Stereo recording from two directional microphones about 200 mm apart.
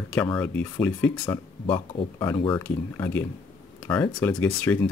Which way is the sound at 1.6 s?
25° left (ahead or behind).